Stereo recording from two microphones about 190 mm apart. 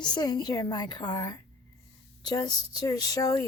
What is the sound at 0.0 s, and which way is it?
Speech, 20° left (ahead or behind).